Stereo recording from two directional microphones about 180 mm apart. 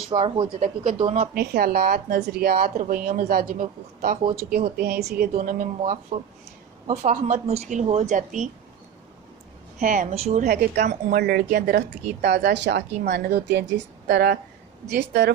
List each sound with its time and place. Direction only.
0.2 s speech: 25° right (ahead or behind)
1.3 s speech: 55° right (ahead or behind)
5.3 s speech: 45° right (ahead or behind)
6.1 s speech: 35° right (ahead or behind)
9.8 s a woman's voice: 50° right (ahead or behind); by 15.3 s 70° right (ahead or behind)